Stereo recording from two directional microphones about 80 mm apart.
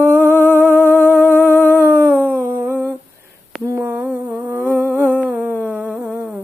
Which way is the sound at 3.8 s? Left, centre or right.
Centre.